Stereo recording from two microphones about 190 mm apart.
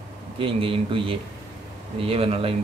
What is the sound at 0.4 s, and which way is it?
A man's voice, 25° right (ahead or behind).